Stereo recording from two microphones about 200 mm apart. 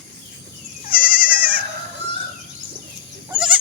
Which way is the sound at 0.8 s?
45° left (ahead or behind).